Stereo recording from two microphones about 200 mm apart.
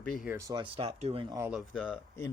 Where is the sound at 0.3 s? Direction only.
15° right (ahead or behind).